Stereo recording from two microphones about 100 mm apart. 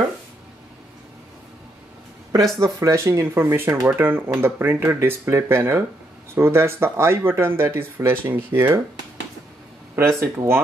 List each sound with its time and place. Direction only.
2.6 s speech: 30° right (ahead or behind)
9.9 s speech: 25° right (ahead or behind)